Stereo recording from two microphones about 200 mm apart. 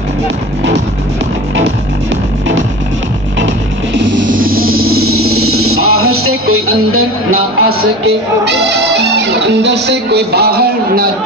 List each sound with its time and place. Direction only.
3.9 s music: 70° right (ahead or behind)
4.3 s music: 45° right (ahead or behind)
4.6 s music: 90° right
8.5 s speech: 60° right (ahead or behind)